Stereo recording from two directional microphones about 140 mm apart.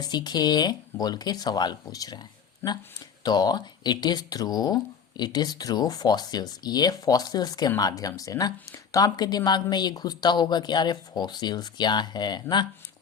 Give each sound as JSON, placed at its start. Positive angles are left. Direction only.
{"t": 0.0, "sound": "speech", "side_deg": 30}
{"t": 2.6, "sound": "speech", "side_deg": 15}
{"t": 3.2, "sound": "a woman's voice", "side_deg": 30}